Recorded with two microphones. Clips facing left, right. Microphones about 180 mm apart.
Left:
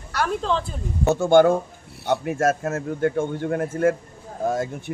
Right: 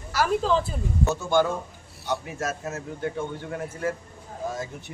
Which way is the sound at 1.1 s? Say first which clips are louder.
Left 9 dB; 55° left (ahead or behind).